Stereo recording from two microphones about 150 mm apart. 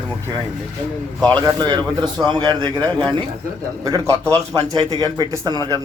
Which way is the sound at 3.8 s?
25° right (ahead or behind).